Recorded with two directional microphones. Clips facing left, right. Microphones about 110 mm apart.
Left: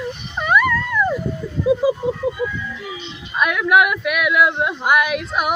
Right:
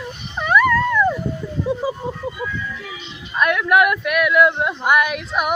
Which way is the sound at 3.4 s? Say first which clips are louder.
Even; 5° left (ahead or behind).